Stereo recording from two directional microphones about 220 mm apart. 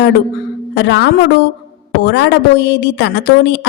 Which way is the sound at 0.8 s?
50° left (ahead or behind).